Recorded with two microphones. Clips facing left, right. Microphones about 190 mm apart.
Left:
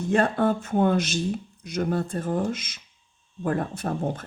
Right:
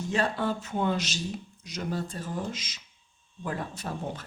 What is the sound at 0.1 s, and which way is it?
A woman's voice, 55° left (ahead or behind).